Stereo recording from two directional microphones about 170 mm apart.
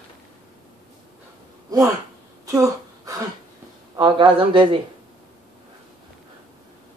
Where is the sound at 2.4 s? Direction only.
20° right (ahead or behind).